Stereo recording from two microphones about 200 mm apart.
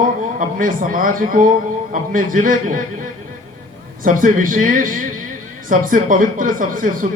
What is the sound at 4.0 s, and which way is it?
Speech, 40° right (ahead or behind).